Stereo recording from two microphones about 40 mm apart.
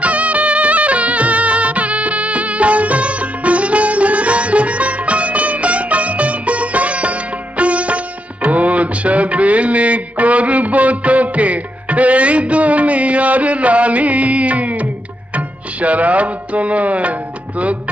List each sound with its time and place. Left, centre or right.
0.0 s music: right